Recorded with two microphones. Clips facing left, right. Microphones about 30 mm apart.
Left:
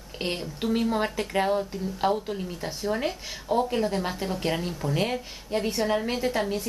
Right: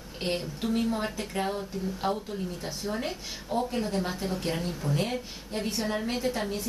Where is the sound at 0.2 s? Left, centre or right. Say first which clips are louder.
Even; centre.